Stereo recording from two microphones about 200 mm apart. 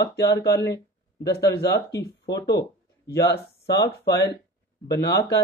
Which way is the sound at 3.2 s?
50° left (ahead or behind).